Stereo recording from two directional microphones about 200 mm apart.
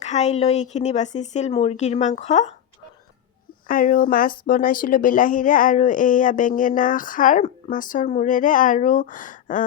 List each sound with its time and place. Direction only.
0.0 s speech: 35° left (ahead or behind)
3.7 s speech: 45° left (ahead or behind)